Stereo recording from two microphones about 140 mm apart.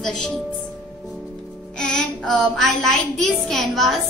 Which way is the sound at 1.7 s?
5° left (ahead or behind).